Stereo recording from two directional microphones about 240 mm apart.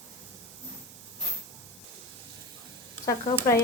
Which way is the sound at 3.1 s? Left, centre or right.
Centre.